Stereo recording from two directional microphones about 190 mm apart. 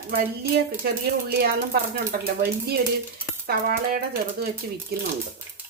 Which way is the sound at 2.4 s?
55° right (ahead or behind).